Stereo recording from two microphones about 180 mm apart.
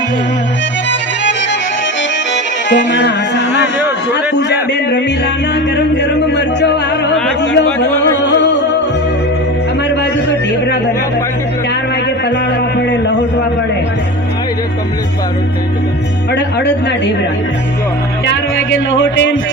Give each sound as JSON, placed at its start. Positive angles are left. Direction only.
{"t": 0.9, "sound": "music", "side_deg": 80}
{"t": 4.1, "sound": "a man's voice", "side_deg": 70}
{"t": 4.7, "sound": "music", "side_deg": 70}
{"t": 9.9, "sound": "a sound", "side_deg": 75}
{"t": 12.8, "sound": "a sound", "side_deg": 75}
{"t": 16.3, "sound": "a man's voice", "side_deg": 70}
{"t": 18.3, "sound": "speech", "side_deg": 90}